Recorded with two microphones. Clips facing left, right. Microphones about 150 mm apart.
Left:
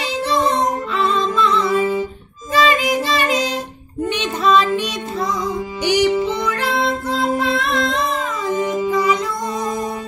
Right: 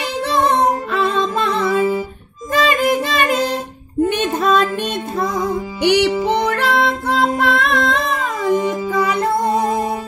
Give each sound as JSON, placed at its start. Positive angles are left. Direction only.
{"t": 0.0, "sound": "music", "side_deg": -60}
{"t": 2.5, "sound": "child singing", "side_deg": -55}
{"t": 4.1, "sound": "music", "side_deg": -50}